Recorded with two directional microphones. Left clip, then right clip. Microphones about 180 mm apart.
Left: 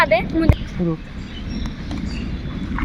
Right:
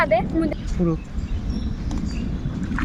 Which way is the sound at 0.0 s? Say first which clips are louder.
Left 3 dB; 15° left (ahead or behind).